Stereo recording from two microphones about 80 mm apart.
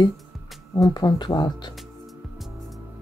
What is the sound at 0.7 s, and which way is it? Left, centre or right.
Speech, left.